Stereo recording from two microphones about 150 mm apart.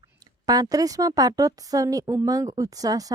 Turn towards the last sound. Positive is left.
turn(degrees=-25)  # may be behind; listen again after turning